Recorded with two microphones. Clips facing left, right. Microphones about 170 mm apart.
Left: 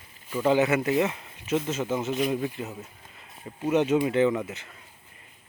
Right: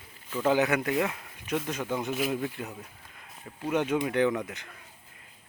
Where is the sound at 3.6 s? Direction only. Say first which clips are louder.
Left 5 dB; 10° left (ahead or behind).